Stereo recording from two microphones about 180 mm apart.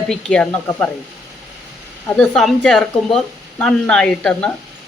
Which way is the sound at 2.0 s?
5° left (ahead or behind).